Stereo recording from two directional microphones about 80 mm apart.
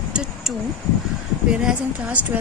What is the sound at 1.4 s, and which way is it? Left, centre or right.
Speech, centre.